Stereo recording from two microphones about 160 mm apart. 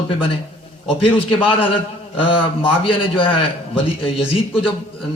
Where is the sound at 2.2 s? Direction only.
35° left (ahead or behind).